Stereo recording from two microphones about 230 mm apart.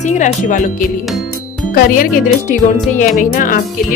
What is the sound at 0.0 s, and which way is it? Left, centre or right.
Speech, left.